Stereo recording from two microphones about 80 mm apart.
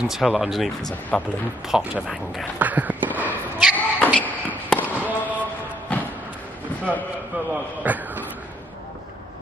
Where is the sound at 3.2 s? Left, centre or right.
Right.